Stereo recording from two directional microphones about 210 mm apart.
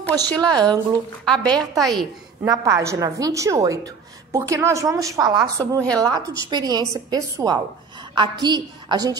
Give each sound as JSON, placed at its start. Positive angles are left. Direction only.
{"t": 0.4, "sound": "a woman's voice", "side_deg": -20}
{"t": 1.2, "sound": "a woman's voice", "side_deg": 5}
{"t": 2.4, "sound": "a woman's voice", "side_deg": -15}